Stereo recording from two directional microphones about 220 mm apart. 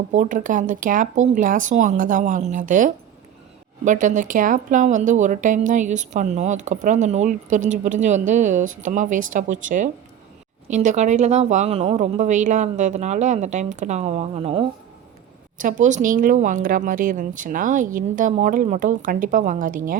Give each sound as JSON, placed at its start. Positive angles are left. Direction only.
{"t": 0.1, "sound": "a woman's voice", "side_deg": -35}